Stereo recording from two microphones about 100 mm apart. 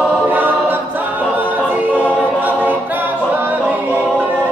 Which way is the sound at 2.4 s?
20° right (ahead or behind).